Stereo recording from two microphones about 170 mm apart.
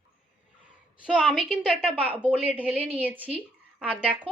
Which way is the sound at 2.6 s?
10° right (ahead or behind).